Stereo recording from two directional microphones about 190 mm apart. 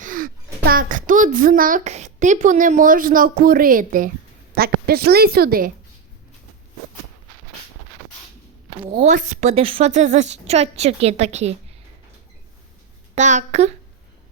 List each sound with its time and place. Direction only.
0.0 s a child's voice: 45° right (ahead or behind)
8.9 s a woman's voice: 30° right (ahead or behind)
9.1 s speech: 40° right (ahead or behind)
13.1 s speech: 40° right (ahead or behind)